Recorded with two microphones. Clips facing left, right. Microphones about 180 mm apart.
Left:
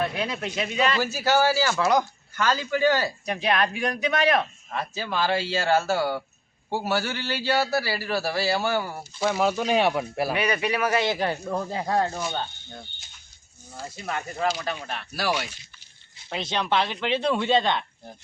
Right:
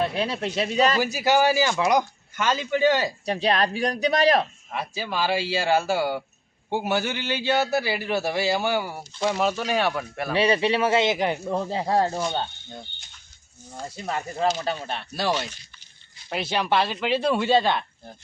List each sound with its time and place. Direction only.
0.0 s speech: 30° right (ahead or behind)
0.9 s a man's voice: 15° right (ahead or behind)
3.2 s speech: 30° right (ahead or behind)
4.7 s a man's voice: 10° right (ahead or behind)
9.1 s speech: 5° left (ahead or behind)
9.6 s speech: 20° left (ahead or behind)
10.3 s a man's voice: 30° right (ahead or behind)
13.9 s a man's voice: 30° right (ahead or behind)
16.3 s speech: 10° right (ahead or behind)